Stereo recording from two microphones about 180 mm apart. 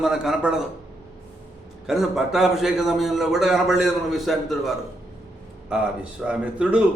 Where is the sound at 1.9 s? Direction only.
Centre (ahead or behind).